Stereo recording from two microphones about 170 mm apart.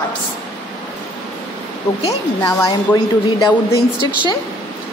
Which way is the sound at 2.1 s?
20° left (ahead or behind).